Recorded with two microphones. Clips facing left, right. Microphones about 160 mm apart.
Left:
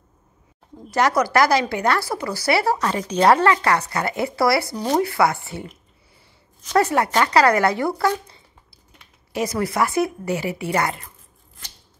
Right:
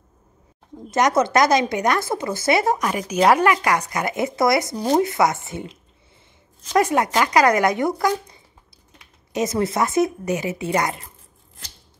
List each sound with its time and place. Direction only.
0.8 s speech: 20° right (ahead or behind)
6.7 s speech: 15° right (ahead or behind)